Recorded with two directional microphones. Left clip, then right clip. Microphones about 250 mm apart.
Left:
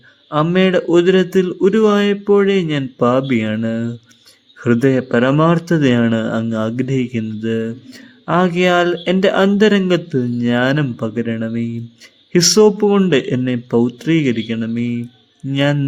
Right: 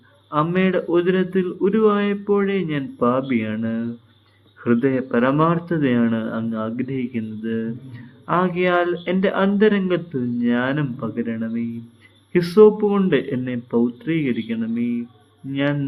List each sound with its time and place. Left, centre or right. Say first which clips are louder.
0.3 s speech: left 5 dB; left